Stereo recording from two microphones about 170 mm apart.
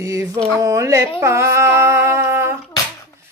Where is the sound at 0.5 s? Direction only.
20° right (ahead or behind).